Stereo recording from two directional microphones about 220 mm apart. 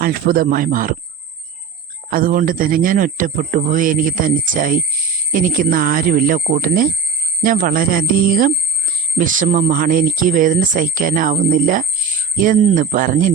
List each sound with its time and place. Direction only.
0.0 s speech: 40° right (ahead or behind)
2.0 s speech: 40° right (ahead or behind)